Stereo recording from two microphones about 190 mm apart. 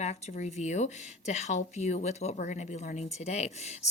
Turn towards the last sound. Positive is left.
turn(degrees=35)  # may be behind; listen again after turning